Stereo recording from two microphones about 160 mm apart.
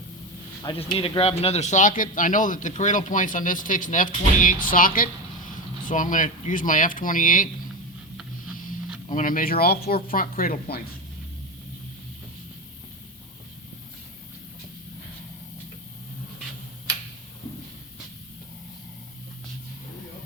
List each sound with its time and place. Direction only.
0.6 s speech: 35° left (ahead or behind); by 7.5 s 55° left (ahead or behind)
9.0 s speech: 55° left (ahead or behind)